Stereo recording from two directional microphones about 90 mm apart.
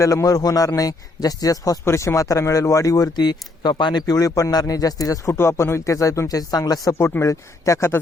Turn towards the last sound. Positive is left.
turn(degrees=35)  # may be behind; listen again after turning